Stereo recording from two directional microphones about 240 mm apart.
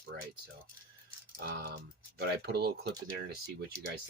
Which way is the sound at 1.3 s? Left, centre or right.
Right.